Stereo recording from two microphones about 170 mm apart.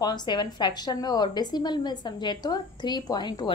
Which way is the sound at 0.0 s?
25° left (ahead or behind).